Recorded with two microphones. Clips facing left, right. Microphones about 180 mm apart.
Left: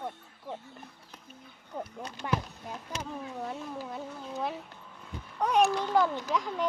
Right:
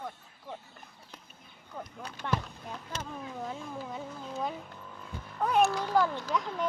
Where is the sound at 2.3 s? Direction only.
10° left (ahead or behind).